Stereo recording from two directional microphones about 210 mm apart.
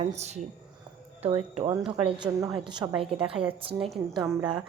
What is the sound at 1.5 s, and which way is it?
A woman's voice, 20° right (ahead or behind).